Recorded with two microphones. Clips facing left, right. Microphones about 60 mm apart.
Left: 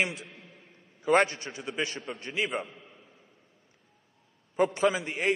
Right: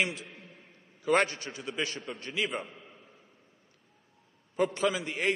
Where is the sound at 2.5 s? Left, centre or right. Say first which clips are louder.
Left 3 dB; centre.